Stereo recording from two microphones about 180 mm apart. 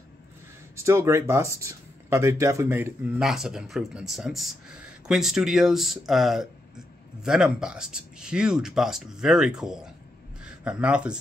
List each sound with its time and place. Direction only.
0.8 s speech: 15° right (ahead or behind)
3.2 s speech: centre (ahead or behind)